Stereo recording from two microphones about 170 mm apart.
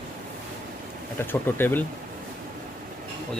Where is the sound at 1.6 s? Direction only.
10° left (ahead or behind).